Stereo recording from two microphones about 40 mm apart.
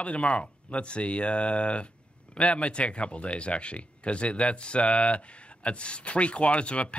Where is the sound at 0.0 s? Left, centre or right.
Left.